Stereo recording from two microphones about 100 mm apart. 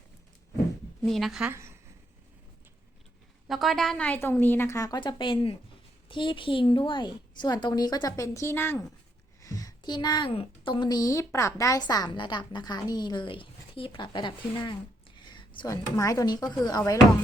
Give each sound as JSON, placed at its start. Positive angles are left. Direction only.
{"t": 1.0, "sound": "a woman's voice", "side_deg": 0}
{"t": 3.5, "sound": "a woman's voice", "side_deg": 0}
{"t": 4.9, "sound": "a woman's voice", "side_deg": 50}
{"t": 9.4, "sound": "a woman's voice", "side_deg": 35}
{"t": 11.8, "sound": "a woman's voice", "side_deg": 45}
{"t": 15.6, "sound": "speech", "side_deg": 35}